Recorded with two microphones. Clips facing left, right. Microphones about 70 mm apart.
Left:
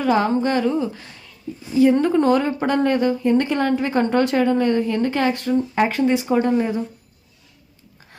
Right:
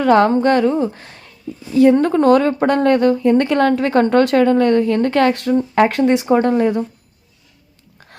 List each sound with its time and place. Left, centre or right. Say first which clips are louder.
0.0 s a woman's voice: right 6 dB; right
1.7 s a woman's voice: right 4 dB; right